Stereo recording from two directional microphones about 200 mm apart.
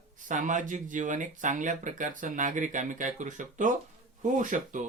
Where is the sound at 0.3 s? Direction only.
40° right (ahead or behind).